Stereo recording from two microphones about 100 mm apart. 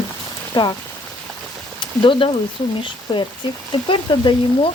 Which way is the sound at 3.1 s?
45° left (ahead or behind).